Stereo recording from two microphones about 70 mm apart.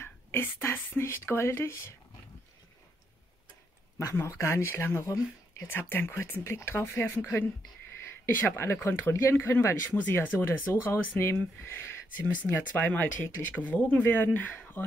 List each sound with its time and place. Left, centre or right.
0.0 s speech: left
4.0 s speech: left
8.0 s a sound: left
8.8 s speech: left
9.8 s speech: left